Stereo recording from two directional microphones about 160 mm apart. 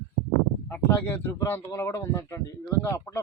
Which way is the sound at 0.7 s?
10° left (ahead or behind).